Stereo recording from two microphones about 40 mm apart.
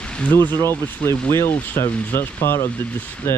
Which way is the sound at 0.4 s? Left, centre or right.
Left.